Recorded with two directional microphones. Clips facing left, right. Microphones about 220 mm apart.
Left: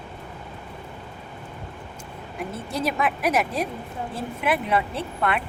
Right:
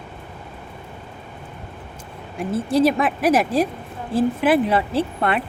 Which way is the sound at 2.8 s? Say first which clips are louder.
Right 7 dB; 35° right (ahead or behind).